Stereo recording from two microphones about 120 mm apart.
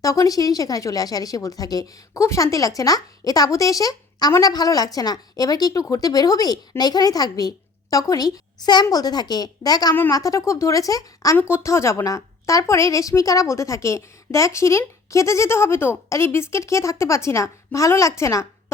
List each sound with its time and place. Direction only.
0.0 s a woman's voice: 30° left (ahead or behind)